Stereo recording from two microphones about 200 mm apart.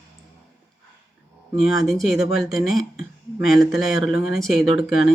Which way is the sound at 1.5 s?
Centre (ahead or behind).